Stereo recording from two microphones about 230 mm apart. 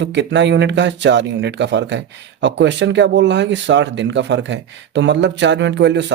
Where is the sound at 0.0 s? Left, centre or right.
Right.